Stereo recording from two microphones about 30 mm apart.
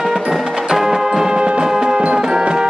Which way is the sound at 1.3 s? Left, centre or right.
Right.